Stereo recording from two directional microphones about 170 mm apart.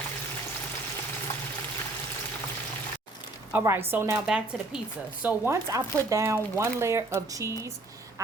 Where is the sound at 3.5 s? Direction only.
15° right (ahead or behind).